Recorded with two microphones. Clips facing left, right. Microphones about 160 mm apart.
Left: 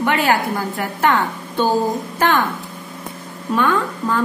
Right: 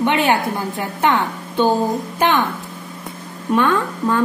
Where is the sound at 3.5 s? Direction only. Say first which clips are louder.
Right 1 dB; 25° right (ahead or behind).